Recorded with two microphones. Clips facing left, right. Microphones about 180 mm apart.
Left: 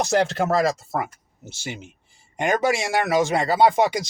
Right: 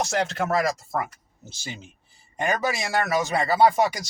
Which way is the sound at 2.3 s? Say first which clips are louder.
Left 4 dB; 15° left (ahead or behind).